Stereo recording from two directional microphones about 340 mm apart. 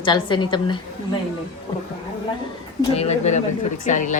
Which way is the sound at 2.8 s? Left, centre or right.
Centre.